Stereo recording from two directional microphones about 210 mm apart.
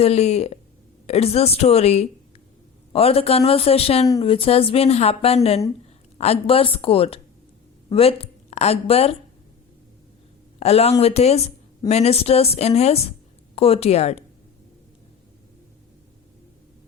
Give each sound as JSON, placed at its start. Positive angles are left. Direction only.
{"t": 0.0, "sound": "a woman's voice", "side_deg": 30}
{"t": 10.6, "sound": "a woman's voice", "side_deg": 30}